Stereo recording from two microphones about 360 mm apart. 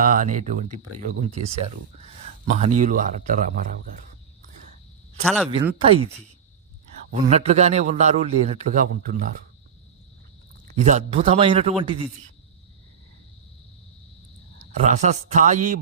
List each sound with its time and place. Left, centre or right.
0.0 s a man's voice: right
5.2 s speech: centre
5.5 s speech: centre
7.1 s a man's voice: centre
10.8 s speech: centre
14.8 s a man's voice: centre